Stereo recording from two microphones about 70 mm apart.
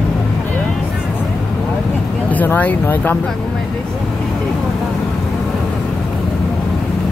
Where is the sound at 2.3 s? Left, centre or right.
Left.